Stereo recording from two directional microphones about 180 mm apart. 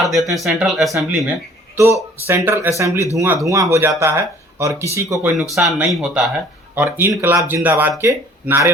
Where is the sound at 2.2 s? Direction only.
15° right (ahead or behind).